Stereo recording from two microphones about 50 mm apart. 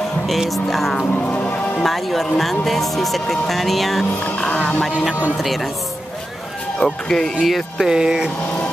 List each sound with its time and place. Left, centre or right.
0.7 s music: centre
1.2 s music: left
1.8 s music: centre
4.5 s speech: left
6.8 s speech: centre
7.4 s music: centre
7.9 s speech: centre